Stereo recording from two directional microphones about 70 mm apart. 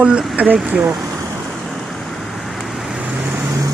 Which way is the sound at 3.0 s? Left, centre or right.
Centre.